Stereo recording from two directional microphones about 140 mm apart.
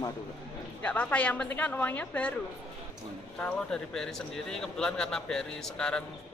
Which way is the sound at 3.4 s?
10° left (ahead or behind).